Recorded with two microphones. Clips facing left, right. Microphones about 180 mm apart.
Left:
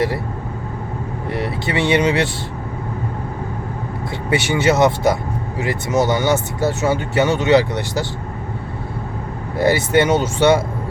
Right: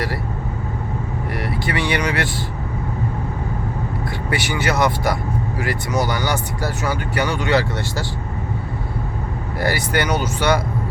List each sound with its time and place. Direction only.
1.3 s speech: 25° left (ahead or behind)
4.3 s speech: 25° left (ahead or behind)
9.6 s speech: 25° left (ahead or behind)